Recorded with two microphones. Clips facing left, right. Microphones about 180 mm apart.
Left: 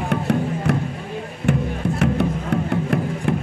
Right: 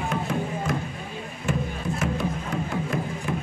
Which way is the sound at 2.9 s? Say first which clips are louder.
Left 7 dB; 65° left (ahead or behind).